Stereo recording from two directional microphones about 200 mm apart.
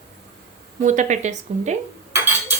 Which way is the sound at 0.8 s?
35° right (ahead or behind).